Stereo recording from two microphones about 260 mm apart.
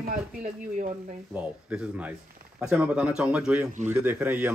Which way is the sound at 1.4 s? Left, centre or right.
Centre.